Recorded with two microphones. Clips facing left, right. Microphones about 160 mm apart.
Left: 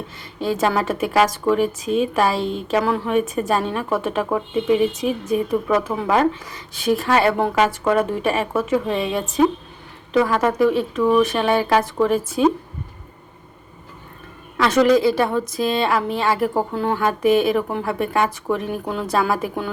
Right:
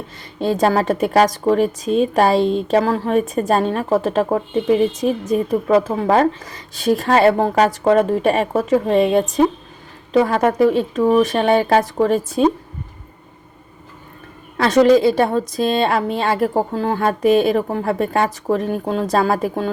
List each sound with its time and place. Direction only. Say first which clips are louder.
0.3 s a woman's voice: right 4 dB; 30° right (ahead or behind); by 9.2 s 50° right (ahead or behind)
10.1 s a woman's voice: right 3 dB; 35° right (ahead or behind)
11.9 s a woman's voice: right 2 dB; 35° right (ahead or behind)
14.8 s a woman's voice: right 4 dB; 25° right (ahead or behind)